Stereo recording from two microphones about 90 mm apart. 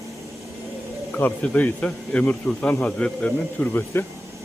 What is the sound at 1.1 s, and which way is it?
A man's voice, 20° left (ahead or behind).